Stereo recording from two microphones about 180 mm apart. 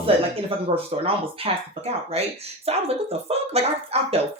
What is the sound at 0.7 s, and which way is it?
Speech, 35° right (ahead or behind).